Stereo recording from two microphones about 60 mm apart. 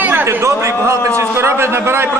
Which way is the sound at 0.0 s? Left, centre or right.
Right.